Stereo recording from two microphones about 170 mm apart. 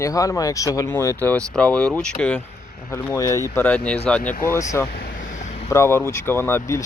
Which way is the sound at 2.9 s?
15° left (ahead or behind).